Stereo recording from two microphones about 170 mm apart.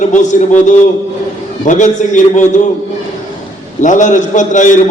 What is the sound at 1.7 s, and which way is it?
Speech, 45° left (ahead or behind).